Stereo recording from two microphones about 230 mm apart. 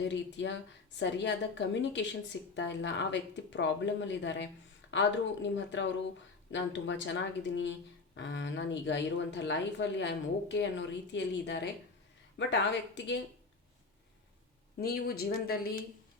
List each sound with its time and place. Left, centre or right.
0.1 s speech: left
14.8 s speech: left